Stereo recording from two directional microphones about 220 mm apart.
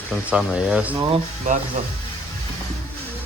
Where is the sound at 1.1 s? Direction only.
35° right (ahead or behind).